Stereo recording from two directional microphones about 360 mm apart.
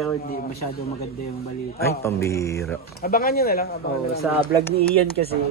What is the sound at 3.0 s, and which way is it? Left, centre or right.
Speech, left.